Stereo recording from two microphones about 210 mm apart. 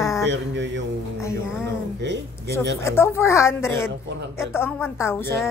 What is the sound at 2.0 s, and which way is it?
Speech, 55° right (ahead or behind).